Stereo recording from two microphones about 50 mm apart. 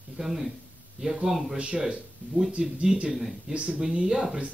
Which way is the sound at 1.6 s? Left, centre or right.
Right.